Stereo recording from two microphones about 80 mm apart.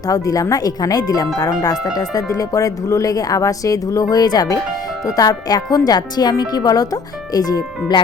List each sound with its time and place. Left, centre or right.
0.1 s speech: left